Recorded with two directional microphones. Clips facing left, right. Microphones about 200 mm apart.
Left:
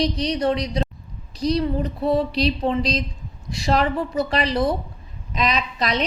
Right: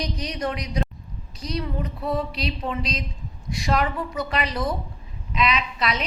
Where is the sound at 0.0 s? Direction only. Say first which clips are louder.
Left 7 dB; 30° left (ahead or behind).